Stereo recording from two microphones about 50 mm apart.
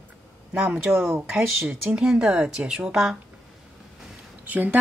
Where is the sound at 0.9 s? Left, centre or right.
Right.